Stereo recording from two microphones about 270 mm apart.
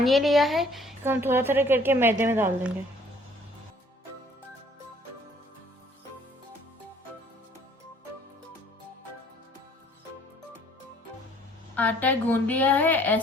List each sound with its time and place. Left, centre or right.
0.0 s a woman's voice: centre
11.8 s a woman's voice: centre